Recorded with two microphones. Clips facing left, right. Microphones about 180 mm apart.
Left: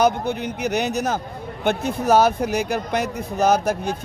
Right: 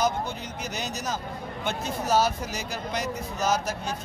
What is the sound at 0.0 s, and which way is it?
Speech, 65° left (ahead or behind).